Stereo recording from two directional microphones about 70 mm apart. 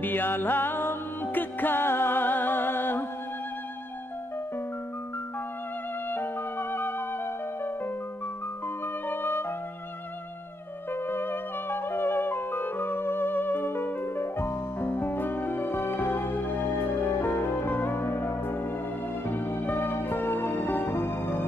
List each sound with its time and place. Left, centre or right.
0.0 s music: left
6.0 s music: left
8.8 s music: left
10.9 s music: left